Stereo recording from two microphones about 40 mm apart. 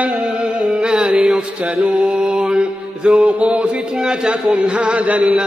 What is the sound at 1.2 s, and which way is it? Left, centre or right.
Mantra, right.